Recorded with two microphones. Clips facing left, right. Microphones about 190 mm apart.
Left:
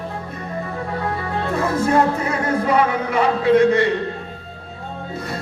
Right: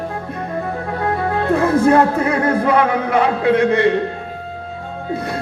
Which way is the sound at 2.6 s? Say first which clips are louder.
Right 3 dB; 55° right (ahead or behind).